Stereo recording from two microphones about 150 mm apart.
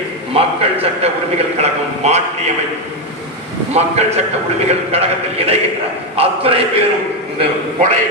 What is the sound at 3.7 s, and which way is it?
Speech, 45° right (ahead or behind).